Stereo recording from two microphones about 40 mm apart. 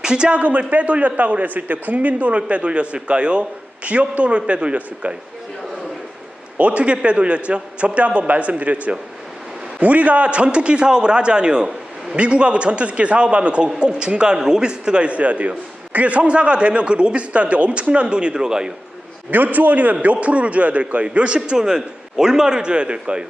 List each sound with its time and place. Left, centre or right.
0.0 s speech: centre
0.3 s a man's voice: right
6.6 s a man's voice: right
19.3 s a man's voice: right